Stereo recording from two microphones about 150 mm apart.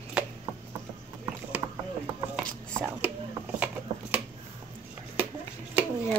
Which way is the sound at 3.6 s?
10° right (ahead or behind).